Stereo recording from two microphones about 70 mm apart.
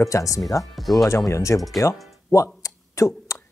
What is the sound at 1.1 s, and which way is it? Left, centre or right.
Speech, left.